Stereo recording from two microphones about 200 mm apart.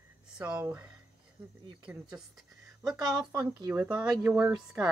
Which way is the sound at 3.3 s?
15° right (ahead or behind).